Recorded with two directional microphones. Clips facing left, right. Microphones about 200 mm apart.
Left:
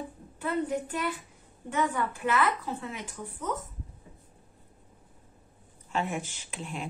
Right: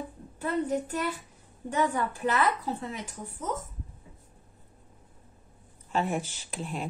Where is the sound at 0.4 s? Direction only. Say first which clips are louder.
Right 1 dB; 40° right (ahead or behind).